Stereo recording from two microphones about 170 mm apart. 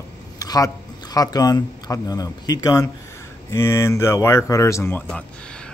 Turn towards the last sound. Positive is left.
turn(degrees=10)  # may be behind; listen again after turning